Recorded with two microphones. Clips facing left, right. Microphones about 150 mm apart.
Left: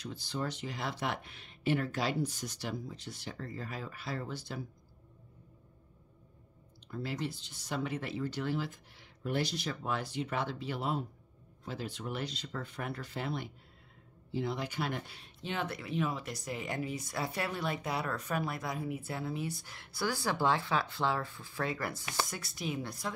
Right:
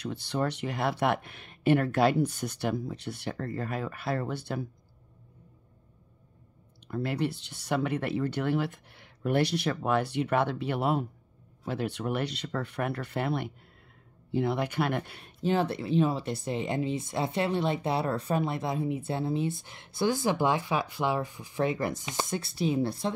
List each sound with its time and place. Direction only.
0.0 s speech: 65° right (ahead or behind)
6.9 s speech: 65° right (ahead or behind)
15.4 s speech: 35° right (ahead or behind)